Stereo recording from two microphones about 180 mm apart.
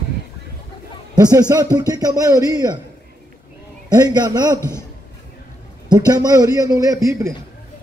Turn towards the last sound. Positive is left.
turn(degrees=-15)  # may be behind; listen again after turning